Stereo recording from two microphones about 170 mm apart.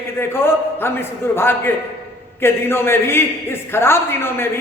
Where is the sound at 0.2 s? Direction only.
15° left (ahead or behind).